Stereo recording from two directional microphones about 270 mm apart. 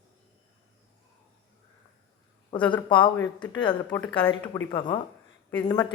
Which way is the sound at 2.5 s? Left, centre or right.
Centre.